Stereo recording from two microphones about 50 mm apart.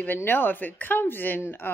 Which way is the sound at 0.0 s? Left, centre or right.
Left.